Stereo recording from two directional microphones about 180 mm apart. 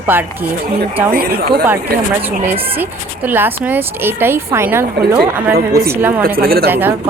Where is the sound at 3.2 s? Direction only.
10° right (ahead or behind).